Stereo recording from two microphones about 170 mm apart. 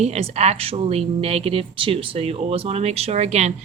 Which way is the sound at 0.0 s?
40° right (ahead or behind).